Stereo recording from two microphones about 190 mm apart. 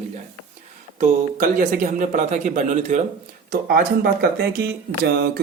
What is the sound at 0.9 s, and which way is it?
A man's voice, 45° right (ahead or behind).